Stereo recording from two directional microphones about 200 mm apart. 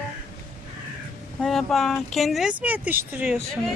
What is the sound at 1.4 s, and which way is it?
Speech, centre (ahead or behind).